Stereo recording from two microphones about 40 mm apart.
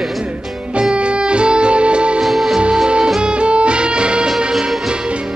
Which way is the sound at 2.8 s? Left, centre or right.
Centre.